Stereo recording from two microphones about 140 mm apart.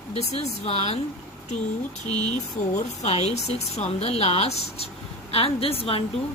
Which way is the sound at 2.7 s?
50° left (ahead or behind).